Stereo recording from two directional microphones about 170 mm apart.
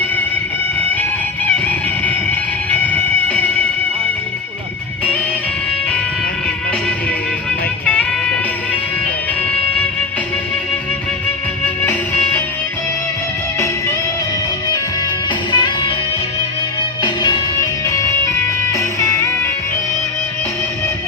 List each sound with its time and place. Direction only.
1.5 s music: 10° left (ahead or behind)
11.6 s music: 10° left (ahead or behind)
15.5 s music: 25° left (ahead or behind)
17.0 s music: 25° left (ahead or behind)